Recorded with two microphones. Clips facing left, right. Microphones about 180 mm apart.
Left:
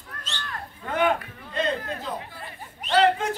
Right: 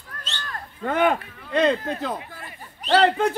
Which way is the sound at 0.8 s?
60° right (ahead or behind).